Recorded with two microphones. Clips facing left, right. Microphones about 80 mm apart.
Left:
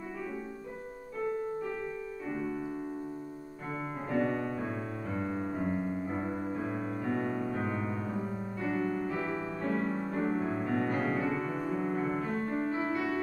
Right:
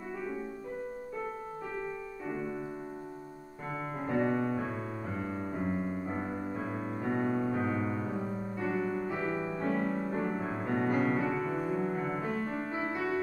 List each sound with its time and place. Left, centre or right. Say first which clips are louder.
4.1 s music: right 1 dB; centre
12.7 s music: left 1 dB; centre